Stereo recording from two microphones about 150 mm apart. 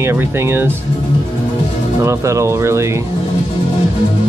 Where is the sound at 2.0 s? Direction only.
20° right (ahead or behind).